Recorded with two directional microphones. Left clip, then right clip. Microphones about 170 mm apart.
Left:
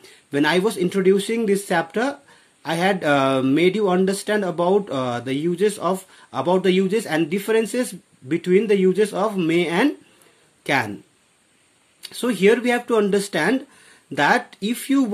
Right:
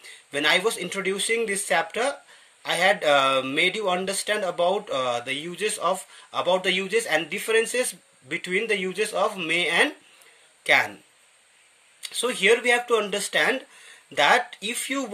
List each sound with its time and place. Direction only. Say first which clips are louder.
0.3 s speech: left 2 dB; 5° right (ahead or behind)
12.2 s speech: left 3 dB; 5° right (ahead or behind)